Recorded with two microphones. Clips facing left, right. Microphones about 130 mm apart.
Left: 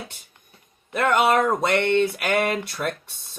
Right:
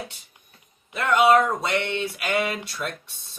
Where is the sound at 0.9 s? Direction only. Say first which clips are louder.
Right 1 dB; 50° left (ahead or behind).